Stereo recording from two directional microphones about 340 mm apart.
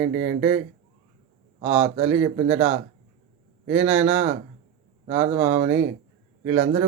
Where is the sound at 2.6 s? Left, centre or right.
Centre.